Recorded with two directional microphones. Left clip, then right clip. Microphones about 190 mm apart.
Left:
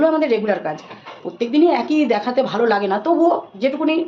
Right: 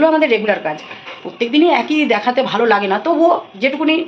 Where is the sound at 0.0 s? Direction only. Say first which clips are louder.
Right 4 dB; 5° left (ahead or behind).